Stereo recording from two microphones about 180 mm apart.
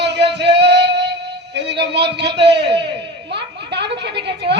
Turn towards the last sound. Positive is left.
turn(degrees=-70)  # may be behind; listen again after turning